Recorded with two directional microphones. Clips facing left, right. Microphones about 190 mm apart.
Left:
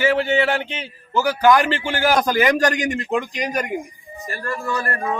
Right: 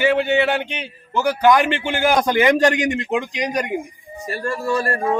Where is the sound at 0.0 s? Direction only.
20° right (ahead or behind).